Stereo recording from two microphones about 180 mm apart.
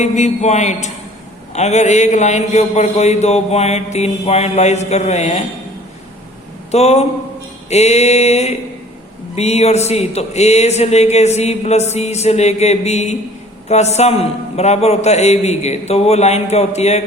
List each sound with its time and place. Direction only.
0.0 s a man's voice: 40° left (ahead or behind)
6.7 s a man's voice: 35° left (ahead or behind)